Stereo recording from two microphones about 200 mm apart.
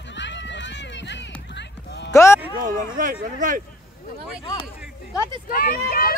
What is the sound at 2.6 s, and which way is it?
Speech, 40° right (ahead or behind).